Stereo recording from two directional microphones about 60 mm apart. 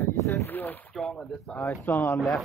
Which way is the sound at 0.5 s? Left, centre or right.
Left.